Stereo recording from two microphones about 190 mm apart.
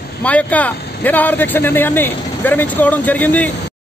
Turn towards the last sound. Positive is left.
turn(degrees=10)  # may be behind; listen again after turning